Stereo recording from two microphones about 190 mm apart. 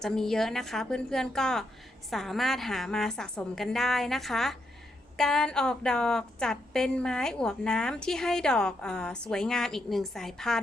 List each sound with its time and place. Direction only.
0.0 s a woman's voice: centre (ahead or behind)